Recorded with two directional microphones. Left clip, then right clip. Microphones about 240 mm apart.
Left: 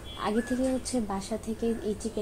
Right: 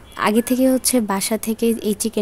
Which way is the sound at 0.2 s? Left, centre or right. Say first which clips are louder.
Right 12 dB; right.